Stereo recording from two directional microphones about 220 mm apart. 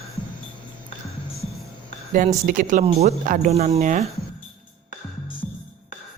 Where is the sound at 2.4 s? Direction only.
35° right (ahead or behind).